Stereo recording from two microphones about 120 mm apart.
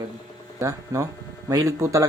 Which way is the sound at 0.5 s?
25° right (ahead or behind).